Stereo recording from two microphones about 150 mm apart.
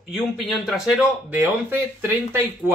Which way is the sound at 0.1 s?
Centre (ahead or behind).